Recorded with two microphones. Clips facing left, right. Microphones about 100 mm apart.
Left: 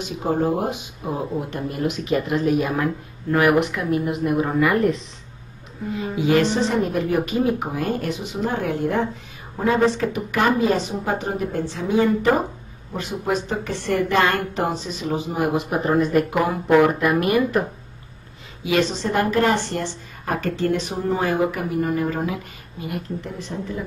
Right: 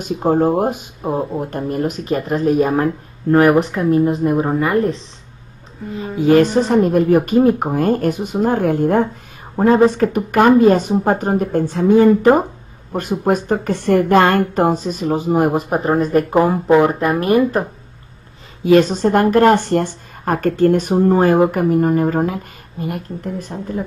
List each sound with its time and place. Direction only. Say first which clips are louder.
0.0 s speech: right 7 dB; 45° right (ahead or behind)